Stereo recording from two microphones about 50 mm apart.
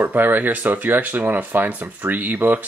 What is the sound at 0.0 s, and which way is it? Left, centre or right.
Speech, right.